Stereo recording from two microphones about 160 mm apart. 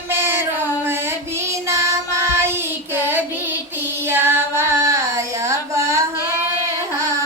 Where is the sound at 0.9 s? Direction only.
15° right (ahead or behind).